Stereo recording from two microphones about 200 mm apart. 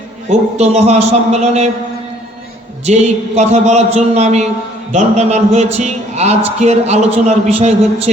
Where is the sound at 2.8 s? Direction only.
35° right (ahead or behind).